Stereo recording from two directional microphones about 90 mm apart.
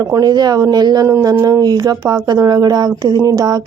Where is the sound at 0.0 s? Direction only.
40° right (ahead or behind).